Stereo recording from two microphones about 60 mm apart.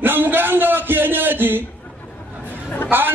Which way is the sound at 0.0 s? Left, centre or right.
Right.